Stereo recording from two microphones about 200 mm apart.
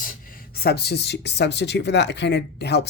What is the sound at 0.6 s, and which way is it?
Speech, 55° left (ahead or behind).